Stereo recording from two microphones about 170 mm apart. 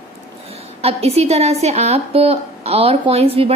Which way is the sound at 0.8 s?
35° right (ahead or behind).